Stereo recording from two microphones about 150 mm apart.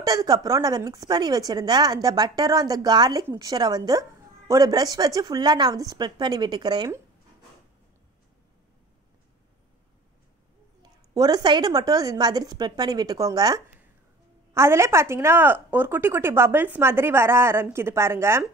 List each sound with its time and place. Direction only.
0.0 s a woman's voice: 25° right (ahead or behind)
10.8 s a woman's voice: 25° right (ahead or behind)